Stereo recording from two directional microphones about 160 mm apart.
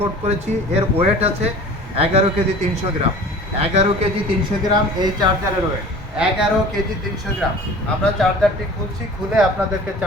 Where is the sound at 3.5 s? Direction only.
40° right (ahead or behind).